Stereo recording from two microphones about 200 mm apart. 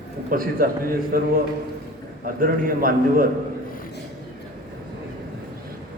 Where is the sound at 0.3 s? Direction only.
45° right (ahead or behind).